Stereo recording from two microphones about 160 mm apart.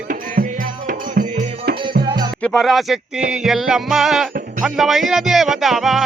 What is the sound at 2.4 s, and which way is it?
Music, 5° left (ahead or behind).